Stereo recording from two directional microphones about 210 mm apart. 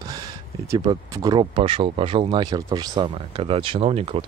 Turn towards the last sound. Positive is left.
turn(degrees=-30)  # may be behind; listen again after turning